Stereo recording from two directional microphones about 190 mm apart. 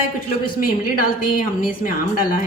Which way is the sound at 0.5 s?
45° left (ahead or behind).